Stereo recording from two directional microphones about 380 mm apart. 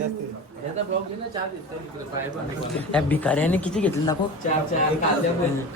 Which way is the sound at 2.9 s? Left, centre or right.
Centre.